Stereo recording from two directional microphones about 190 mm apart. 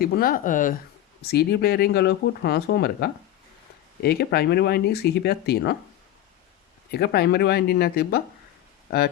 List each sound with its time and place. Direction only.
0.0 s speech: 50° left (ahead or behind)
1.2 s speech: 55° left (ahead or behind)
6.9 s speech: 55° left (ahead or behind)